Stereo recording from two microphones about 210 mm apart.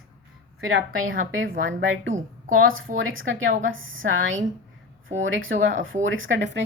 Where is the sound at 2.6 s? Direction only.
70° right (ahead or behind).